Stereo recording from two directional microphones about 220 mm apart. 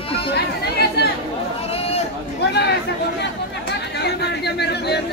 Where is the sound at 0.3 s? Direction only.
45° left (ahead or behind).